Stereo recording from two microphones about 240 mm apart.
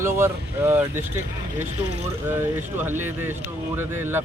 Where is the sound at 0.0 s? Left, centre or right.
Centre.